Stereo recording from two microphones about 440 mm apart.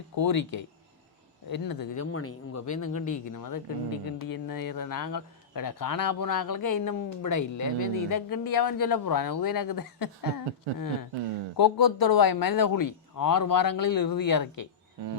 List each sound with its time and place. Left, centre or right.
0.2 s speech: left
2.1 s speech: left